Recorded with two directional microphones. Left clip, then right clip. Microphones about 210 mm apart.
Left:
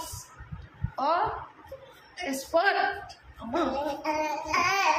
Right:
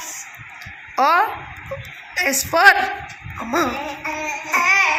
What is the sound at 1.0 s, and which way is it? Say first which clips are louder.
A man's voice: right 10 dB; 35° right (ahead or behind).